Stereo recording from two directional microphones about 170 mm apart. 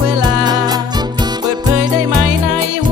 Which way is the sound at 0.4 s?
25° right (ahead or behind).